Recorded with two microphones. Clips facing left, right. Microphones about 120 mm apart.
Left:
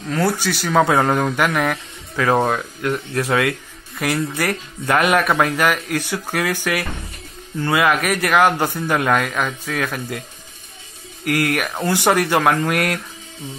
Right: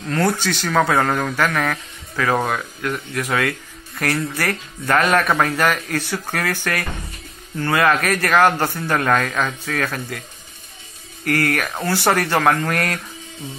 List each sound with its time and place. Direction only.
0.1 s speech: 5° left (ahead or behind); by 3.5 s 25° left (ahead or behind)
4.0 s speech: 10° left (ahead or behind)
11.2 s speech: 15° left (ahead or behind)